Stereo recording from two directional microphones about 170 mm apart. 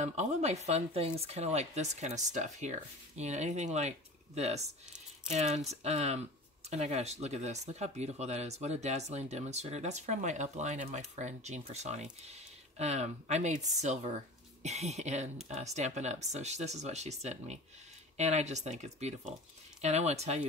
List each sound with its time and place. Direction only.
0.0 s speech: 40° right (ahead or behind)